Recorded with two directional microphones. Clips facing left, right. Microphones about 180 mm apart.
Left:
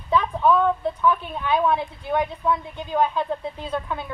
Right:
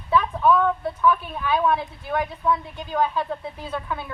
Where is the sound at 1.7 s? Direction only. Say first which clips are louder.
Left 1 dB; 20° left (ahead or behind).